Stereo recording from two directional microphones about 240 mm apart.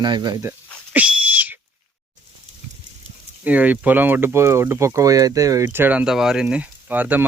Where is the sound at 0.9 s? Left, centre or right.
Centre.